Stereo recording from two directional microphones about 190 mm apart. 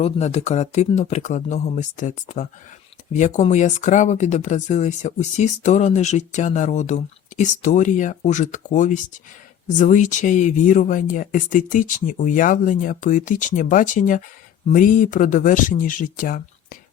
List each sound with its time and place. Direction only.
0.0 s speech: 35° left (ahead or behind)